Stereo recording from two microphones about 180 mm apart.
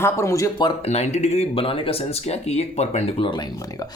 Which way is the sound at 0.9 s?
40° left (ahead or behind).